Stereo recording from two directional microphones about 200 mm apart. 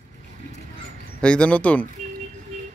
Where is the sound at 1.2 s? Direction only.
5° left (ahead or behind).